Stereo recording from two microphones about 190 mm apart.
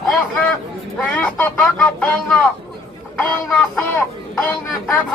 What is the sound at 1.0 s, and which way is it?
A man's voice, 5° left (ahead or behind).